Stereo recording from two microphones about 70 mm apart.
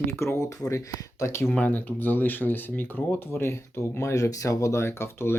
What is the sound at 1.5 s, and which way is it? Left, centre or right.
Speech, left.